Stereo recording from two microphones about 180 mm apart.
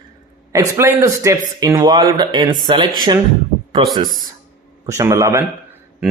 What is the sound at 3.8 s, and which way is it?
Speech, 30° right (ahead or behind).